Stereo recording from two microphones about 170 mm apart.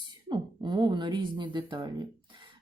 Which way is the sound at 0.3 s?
25° right (ahead or behind).